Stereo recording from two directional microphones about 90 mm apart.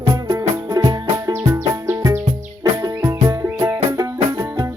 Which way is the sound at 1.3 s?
25° right (ahead or behind).